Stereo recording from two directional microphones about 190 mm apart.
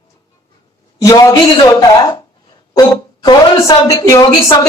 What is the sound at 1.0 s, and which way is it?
A woman's voice, 20° left (ahead or behind).